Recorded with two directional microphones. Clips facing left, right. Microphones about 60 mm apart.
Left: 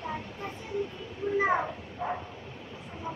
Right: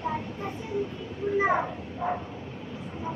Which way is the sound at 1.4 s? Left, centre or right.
Centre.